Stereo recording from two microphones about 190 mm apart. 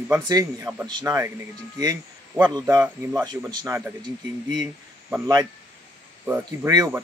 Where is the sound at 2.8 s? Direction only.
5° right (ahead or behind).